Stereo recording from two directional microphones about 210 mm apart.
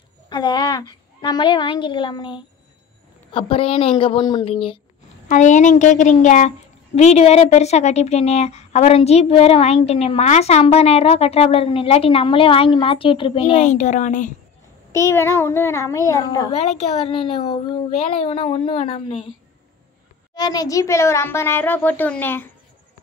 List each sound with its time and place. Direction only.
0.3 s a woman's voice: 20° left (ahead or behind)
5.3 s a woman's voice: 35° left (ahead or behind)
14.9 s a child's voice: 15° left (ahead or behind)
16.5 s a woman's voice: 30° left (ahead or behind)
20.3 s a child's voice: 20° left (ahead or behind)